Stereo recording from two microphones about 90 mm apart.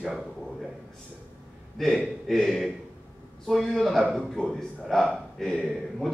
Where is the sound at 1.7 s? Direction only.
5° left (ahead or behind).